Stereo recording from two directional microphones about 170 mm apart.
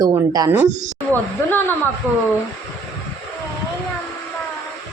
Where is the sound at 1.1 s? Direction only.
10° left (ahead or behind).